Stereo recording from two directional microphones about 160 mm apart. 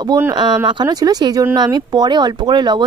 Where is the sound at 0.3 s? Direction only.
30° right (ahead or behind).